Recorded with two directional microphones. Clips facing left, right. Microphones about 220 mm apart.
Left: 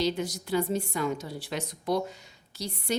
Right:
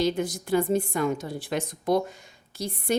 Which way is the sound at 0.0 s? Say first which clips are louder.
Right 3 dB; 50° right (ahead or behind).